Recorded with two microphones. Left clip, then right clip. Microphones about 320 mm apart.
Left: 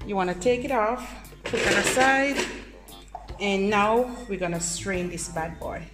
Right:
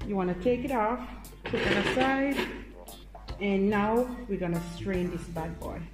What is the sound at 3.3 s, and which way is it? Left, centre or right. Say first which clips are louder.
Speech: left 5 dB; left.